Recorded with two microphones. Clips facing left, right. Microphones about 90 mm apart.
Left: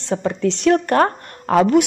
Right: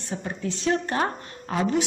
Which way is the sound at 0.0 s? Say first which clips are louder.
Left 11 dB; 85° left.